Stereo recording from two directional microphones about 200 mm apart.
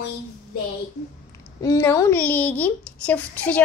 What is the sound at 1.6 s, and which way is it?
Speech, 15° left (ahead or behind).